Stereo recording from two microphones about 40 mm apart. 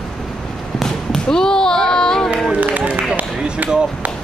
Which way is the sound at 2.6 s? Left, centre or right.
Right.